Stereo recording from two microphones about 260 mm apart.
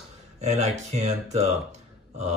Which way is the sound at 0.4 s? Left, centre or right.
Right.